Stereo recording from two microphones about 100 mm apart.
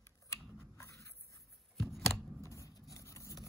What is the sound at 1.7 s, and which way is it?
Scissors, centre (ahead or behind).